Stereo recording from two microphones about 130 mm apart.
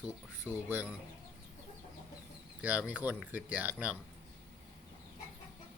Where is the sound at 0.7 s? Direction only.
15° right (ahead or behind).